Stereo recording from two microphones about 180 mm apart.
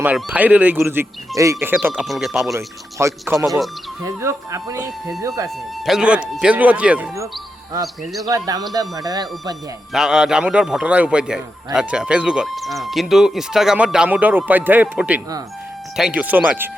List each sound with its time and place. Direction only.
0.0 s speech: 10° right (ahead or behind)
1.9 s a man's voice: centre (ahead or behind)
2.5 s speech: 15° right (ahead or behind)
5.8 s speech: 5° right (ahead or behind)
8.7 s speech: 20° right (ahead or behind)
9.9 s a man's voice: 5° right (ahead or behind)